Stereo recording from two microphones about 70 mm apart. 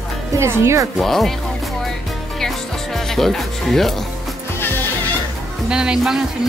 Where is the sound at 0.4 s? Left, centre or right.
Right.